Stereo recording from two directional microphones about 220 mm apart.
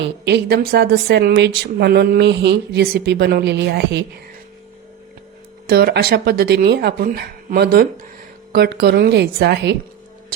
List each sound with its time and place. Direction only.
0.3 s a woman's voice: 50° right (ahead or behind)
5.6 s a woman's voice: 45° right (ahead or behind)